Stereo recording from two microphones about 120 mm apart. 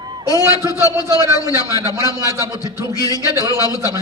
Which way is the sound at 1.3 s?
30° left (ahead or behind).